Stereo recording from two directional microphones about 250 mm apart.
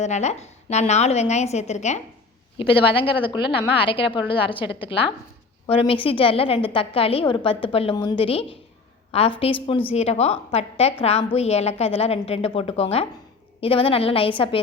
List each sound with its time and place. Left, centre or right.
0.0 s a woman's voice: left